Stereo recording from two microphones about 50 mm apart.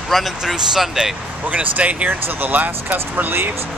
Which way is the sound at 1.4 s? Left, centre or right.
Right.